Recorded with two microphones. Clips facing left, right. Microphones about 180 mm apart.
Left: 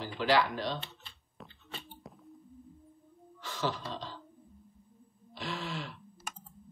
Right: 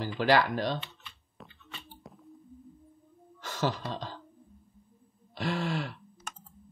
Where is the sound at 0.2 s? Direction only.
50° right (ahead or behind).